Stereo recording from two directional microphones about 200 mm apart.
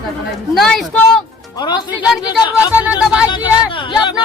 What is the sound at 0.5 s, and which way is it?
Speech, centre (ahead or behind).